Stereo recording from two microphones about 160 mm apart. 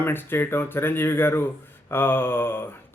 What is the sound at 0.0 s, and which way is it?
Speech, 15° left (ahead or behind).